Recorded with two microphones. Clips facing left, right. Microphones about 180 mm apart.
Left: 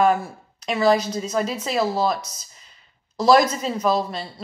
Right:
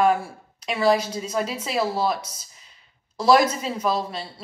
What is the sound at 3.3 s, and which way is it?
Speech, 5° right (ahead or behind).